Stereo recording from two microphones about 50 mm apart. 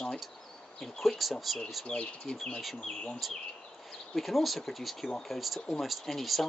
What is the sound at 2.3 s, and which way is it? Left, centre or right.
Speech, centre.